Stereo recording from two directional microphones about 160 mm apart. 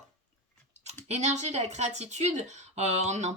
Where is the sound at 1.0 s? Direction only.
45° right (ahead or behind).